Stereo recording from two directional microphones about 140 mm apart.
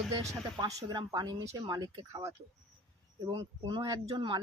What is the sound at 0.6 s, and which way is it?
Speech, 30° right (ahead or behind).